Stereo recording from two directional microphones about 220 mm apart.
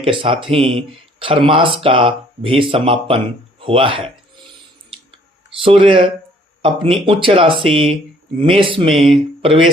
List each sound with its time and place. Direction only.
0.0 s speech: 25° right (ahead or behind)
5.6 s speech: 25° right (ahead or behind)